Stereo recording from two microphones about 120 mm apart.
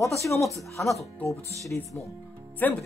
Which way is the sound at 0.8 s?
Centre (ahead or behind).